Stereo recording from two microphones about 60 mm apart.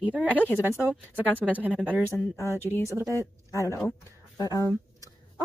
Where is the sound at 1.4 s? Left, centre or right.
Right.